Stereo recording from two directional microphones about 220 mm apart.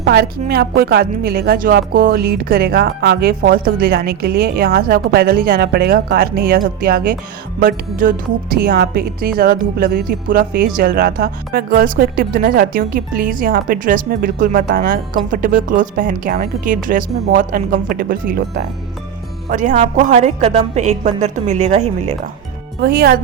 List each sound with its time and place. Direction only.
0.0 s a woman's voice: 45° right (ahead or behind); by 22.1 s 30° right (ahead or behind)
22.8 s a woman's voice: 45° right (ahead or behind)